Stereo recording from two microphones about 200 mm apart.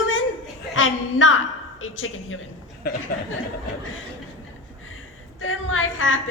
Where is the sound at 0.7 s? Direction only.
75° left (ahead or behind).